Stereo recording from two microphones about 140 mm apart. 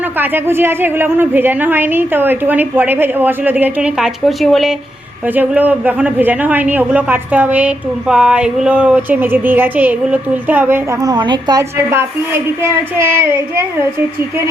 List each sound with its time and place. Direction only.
0.2 s a man's voice: 15° right (ahead or behind); by 4.7 s centre (ahead or behind)
5.3 s a man's voice: 10° right (ahead or behind)
11.0 s a woman's voice: 30° right (ahead or behind)
11.9 s a man's voice: 20° right (ahead or behind)